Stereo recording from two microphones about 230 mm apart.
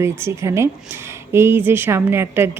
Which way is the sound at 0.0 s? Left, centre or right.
Centre.